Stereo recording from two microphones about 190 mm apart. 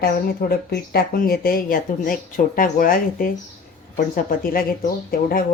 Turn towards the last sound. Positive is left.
turn(degrees=50)  # may be behind; listen again after turning